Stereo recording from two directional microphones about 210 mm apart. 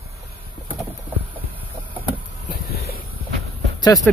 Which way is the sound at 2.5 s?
45° left (ahead or behind).